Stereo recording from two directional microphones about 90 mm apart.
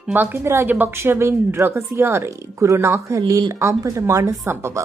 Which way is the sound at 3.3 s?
50° right (ahead or behind).